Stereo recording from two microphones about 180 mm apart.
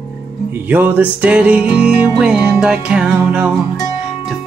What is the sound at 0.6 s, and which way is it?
Music, 10° right (ahead or behind).